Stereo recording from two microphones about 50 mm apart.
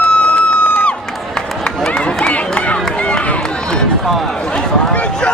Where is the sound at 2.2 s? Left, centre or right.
Left.